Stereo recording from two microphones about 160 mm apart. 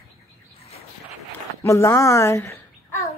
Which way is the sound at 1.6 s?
15° left (ahead or behind).